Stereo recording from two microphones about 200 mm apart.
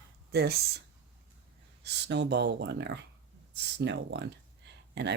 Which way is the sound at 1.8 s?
60° right (ahead or behind).